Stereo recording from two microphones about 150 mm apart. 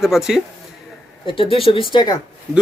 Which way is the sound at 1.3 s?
35° left (ahead or behind).